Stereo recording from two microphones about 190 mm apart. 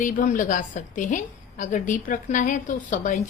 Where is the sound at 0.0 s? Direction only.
45° left (ahead or behind).